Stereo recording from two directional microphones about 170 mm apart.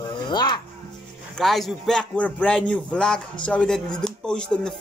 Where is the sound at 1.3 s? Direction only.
Centre (ahead or behind).